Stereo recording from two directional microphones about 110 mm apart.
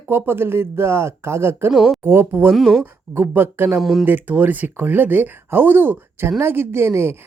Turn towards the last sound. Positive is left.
turn(degrees=-20)  # may be behind; listen again after turning